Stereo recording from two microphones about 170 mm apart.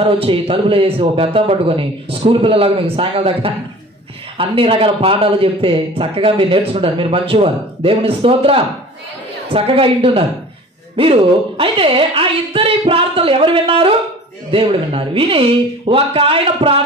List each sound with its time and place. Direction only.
0.0 s a man's voice: 30° right (ahead or behind)